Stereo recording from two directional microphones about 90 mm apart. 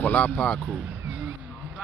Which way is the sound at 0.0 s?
15° left (ahead or behind).